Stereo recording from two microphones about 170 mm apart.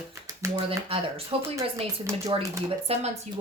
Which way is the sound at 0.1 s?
20° right (ahead or behind).